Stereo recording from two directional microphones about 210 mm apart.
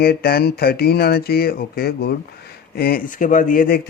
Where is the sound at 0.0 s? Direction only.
50° left (ahead or behind).